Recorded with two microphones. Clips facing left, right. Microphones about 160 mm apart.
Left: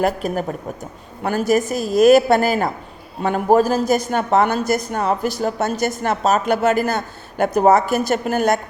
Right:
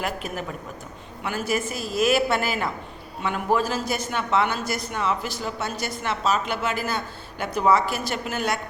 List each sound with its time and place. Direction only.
0.0 s a woman's voice: 40° left (ahead or behind)